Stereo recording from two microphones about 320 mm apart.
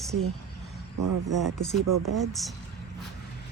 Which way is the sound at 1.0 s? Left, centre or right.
Right.